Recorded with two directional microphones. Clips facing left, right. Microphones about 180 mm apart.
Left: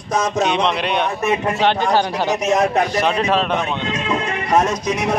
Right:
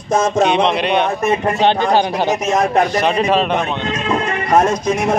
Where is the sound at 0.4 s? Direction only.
50° right (ahead or behind).